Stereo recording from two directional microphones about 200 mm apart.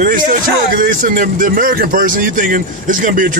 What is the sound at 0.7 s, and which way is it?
Speech, 40° right (ahead or behind).